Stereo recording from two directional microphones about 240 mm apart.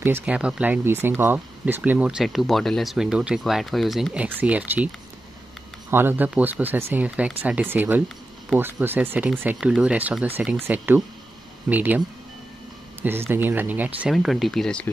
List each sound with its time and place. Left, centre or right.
0.0 s speech: centre
13.3 s speech: centre